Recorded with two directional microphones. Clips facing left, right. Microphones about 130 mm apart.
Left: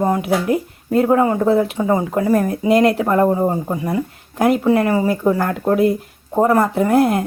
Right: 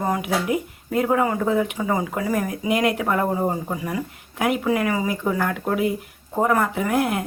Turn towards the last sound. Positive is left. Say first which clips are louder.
# left 7 dB
turn(degrees=35)  # may be behind; listen again after turning